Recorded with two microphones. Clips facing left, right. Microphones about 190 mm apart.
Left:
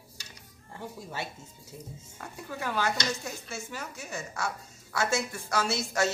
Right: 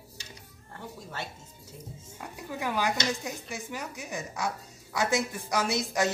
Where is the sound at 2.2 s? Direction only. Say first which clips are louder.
Right 2 dB; 15° right (ahead or behind).